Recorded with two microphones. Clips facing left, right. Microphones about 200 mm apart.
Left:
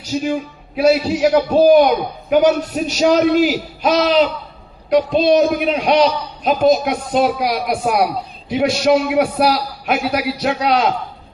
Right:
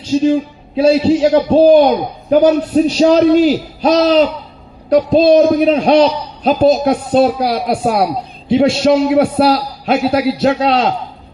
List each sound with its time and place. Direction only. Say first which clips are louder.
0.1 s a man's voice: right 7 dB; 25° right (ahead or behind)